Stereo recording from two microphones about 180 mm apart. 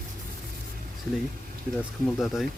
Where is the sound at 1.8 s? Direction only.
Centre (ahead or behind).